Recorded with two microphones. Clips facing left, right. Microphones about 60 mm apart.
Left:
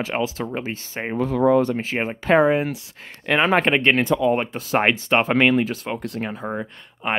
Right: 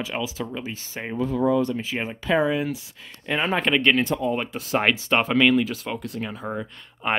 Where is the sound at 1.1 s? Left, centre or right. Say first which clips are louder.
Left 4 dB; left.